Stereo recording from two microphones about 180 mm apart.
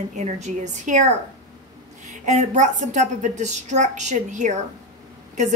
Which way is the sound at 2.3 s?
40° right (ahead or behind).